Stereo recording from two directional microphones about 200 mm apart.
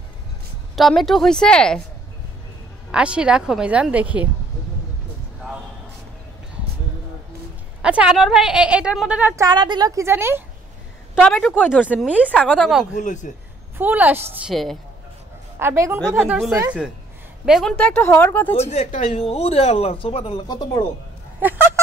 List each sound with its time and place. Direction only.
0.7 s a woman's voice: centre (ahead or behind)
2.9 s a woman's voice: 5° right (ahead or behind)
7.8 s a woman's voice: 5° right (ahead or behind)
9.4 s a woman's voice: 20° right (ahead or behind)
11.1 s speech: 5° left (ahead or behind)
11.7 s a woman's voice: 5° right (ahead or behind)
12.3 s a woman's voice: 5° left (ahead or behind)
12.9 s speech: 35° left (ahead or behind)
13.7 s a woman's voice: 10° right (ahead or behind)
15.6 s a woman's voice: 15° right (ahead or behind)
16.0 s a woman's voice: centre (ahead or behind)
18.5 s speech: 30° left (ahead or behind)
21.4 s honk: 10° right (ahead or behind)